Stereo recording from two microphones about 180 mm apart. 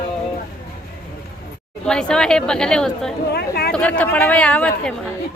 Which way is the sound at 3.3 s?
60° left (ahead or behind).